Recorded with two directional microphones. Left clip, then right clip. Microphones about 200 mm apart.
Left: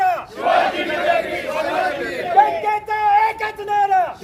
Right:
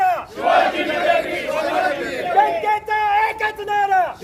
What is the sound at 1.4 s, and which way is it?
Chatter, 50° right (ahead or behind).